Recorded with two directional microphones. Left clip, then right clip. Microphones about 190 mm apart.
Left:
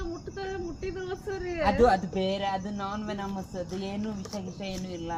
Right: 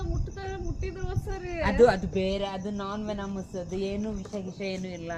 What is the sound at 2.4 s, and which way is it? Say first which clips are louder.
Speech: left 2 dB; 25° right (ahead or behind).